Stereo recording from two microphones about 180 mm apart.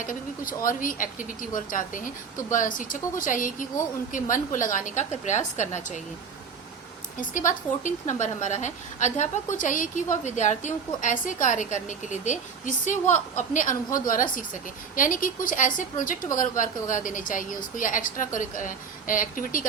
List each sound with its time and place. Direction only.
0.0 s a woman's voice: 50° left (ahead or behind)
7.2 s a woman's voice: 45° left (ahead or behind)